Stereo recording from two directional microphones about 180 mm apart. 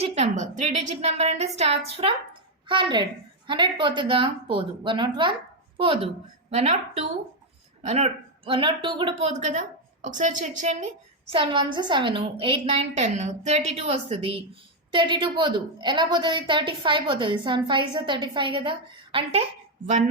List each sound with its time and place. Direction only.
0.0 s a woman's voice: 35° right (ahead or behind)
9.4 s a woman's voice: 45° right (ahead or behind)
11.3 s a woman's voice: 30° right (ahead or behind)